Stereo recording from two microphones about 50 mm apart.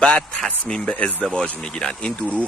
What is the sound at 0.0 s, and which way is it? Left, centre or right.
Speech, centre.